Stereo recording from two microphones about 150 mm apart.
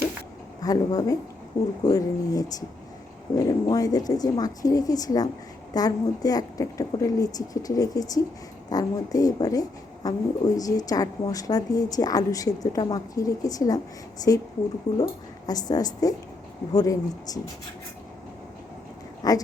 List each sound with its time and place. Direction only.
0.6 s speech: 25° left (ahead or behind)
19.2 s speech: 25° left (ahead or behind)